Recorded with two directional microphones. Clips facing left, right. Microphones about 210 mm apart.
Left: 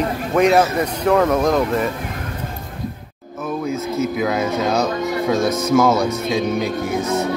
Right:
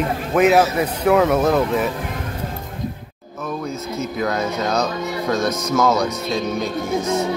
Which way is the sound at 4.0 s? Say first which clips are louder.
Left 2 dB; 5° left (ahead or behind).